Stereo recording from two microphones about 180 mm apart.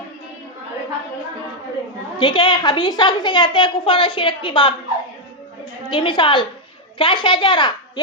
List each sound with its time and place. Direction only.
2.1 s a woman's voice: 25° left (ahead or behind)
5.9 s a woman's voice: 25° left (ahead or behind)